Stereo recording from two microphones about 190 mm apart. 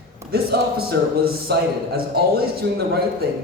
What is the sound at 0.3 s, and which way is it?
A man's voice, 55° right (ahead or behind).